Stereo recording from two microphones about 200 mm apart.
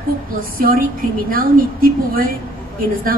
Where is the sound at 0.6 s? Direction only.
45° right (ahead or behind).